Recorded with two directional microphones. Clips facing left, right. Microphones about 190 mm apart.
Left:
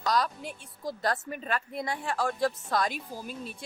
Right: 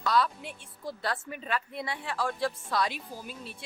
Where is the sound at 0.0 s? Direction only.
40° left (ahead or behind).